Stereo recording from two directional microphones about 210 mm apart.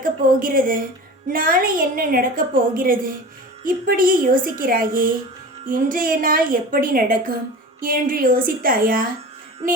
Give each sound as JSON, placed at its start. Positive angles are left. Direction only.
{"t": 0.0, "sound": "a woman's voice", "side_deg": -40}